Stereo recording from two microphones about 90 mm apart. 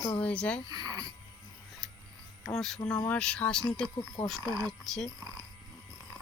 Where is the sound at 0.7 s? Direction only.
50° right (ahead or behind).